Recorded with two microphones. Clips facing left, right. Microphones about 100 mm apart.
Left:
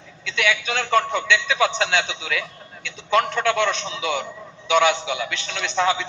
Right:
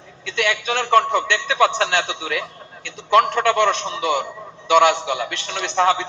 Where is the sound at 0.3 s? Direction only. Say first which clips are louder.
Right 2 dB; 55° right (ahead or behind).